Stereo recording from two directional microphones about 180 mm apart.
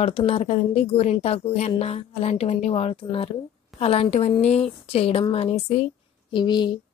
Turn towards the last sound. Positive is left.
turn(degrees=25)  # may be behind; listen again after turning